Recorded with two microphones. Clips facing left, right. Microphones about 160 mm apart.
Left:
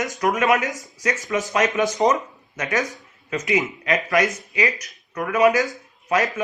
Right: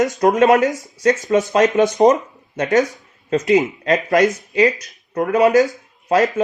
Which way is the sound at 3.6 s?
25° right (ahead or behind).